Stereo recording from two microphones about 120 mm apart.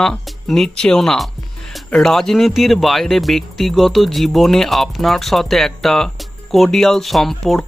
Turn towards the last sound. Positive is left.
turn(degrees=0)  # may be behind; listen again after turning